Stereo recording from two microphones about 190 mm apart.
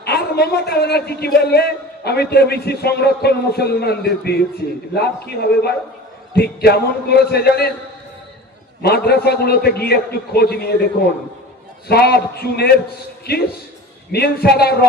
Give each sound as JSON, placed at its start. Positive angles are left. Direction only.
{"t": 0.0, "sound": "a man's voice", "side_deg": 60}
{"t": 8.8, "sound": "a man's voice", "side_deg": 55}
{"t": 11.9, "sound": "a man's voice", "side_deg": 55}